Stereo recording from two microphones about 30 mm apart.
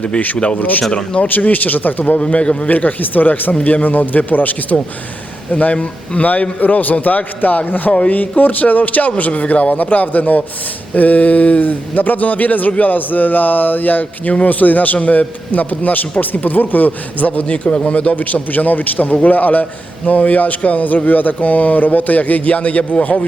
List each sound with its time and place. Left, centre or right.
0.3 s a man's voice: left
1.3 s speech: left
2.1 s a man's voice: left
2.6 s speech: left
5.7 s speech: left
6.6 s a man's voice: left
12.8 s speech: left
14.4 s a man's voice: left
16.3 s speech: left
17.8 s speech: left
18.5 s a man's voice: left
20.1 s a man's voice: left